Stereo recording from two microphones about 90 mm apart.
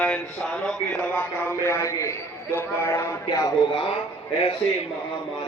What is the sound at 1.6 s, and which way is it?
A man's voice, 30° left (ahead or behind).